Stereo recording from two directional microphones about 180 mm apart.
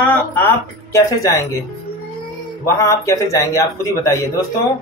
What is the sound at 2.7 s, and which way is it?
Speech, 15° left (ahead or behind).